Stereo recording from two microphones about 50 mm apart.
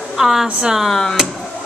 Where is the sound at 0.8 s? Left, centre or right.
Centre.